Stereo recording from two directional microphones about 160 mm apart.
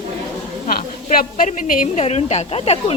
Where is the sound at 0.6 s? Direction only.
50° left (ahead or behind).